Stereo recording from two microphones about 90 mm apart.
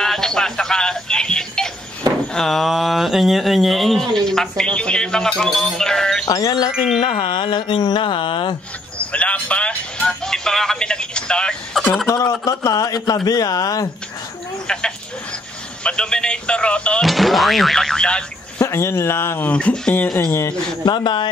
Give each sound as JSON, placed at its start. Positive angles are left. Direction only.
{"t": 0.0, "sound": "music", "side_deg": 5}
{"t": 2.3, "sound": "a sound", "side_deg": 5}
{"t": 6.2, "sound": "music", "side_deg": 45}
{"t": 6.7, "sound": "chime", "side_deg": -10}
{"t": 7.0, "sound": "music", "side_deg": 60}
{"t": 8.9, "sound": "music", "side_deg": 15}
{"t": 12.3, "sound": "a man's voice", "side_deg": 40}
{"t": 15.8, "sound": "speech", "side_deg": 10}
{"t": 17.0, "sound": "speech", "side_deg": 0}
{"t": 18.6, "sound": "speech", "side_deg": 30}
{"t": 19.5, "sound": "speech", "side_deg": 10}
{"t": 20.2, "sound": "a man's voice", "side_deg": 40}
{"t": 20.8, "sound": "music", "side_deg": 60}